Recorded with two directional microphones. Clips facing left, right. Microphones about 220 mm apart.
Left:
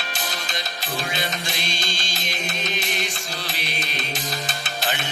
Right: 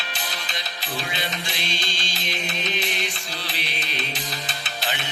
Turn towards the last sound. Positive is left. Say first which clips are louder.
# left 3 dB
turn(degrees=45)  # may be behind; listen again after turning